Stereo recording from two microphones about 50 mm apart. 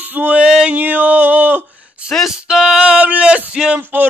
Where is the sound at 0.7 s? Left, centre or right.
Right.